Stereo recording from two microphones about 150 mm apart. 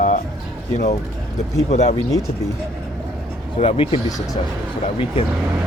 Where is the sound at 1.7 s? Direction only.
45° left (ahead or behind).